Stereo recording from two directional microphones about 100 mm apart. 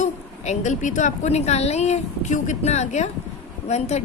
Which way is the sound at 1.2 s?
90° left.